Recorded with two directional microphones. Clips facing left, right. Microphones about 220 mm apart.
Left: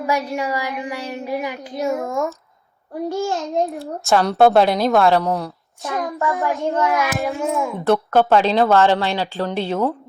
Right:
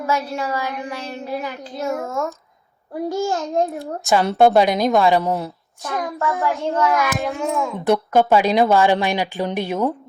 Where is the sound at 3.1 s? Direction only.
Centre (ahead or behind).